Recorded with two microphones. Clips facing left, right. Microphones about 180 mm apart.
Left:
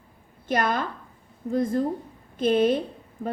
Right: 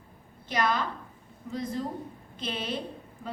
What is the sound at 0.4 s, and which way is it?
A woman's voice, 50° left (ahead or behind).